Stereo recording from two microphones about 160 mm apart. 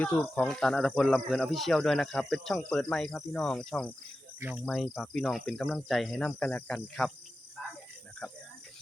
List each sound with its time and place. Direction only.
0.0 s speech: 10° left (ahead or behind)
4.4 s speech: 10° right (ahead or behind)